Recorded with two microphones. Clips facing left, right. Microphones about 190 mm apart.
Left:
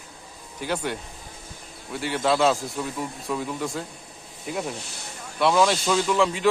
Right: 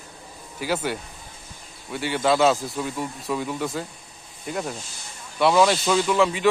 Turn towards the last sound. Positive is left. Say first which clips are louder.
# right 2 dB
turn(degrees=0)  # may be behind; listen again after turning